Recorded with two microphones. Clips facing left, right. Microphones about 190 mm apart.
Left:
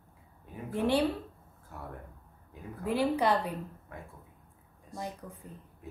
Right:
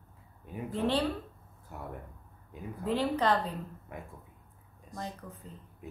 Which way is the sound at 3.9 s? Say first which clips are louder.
Right 4 dB; 15° right (ahead or behind).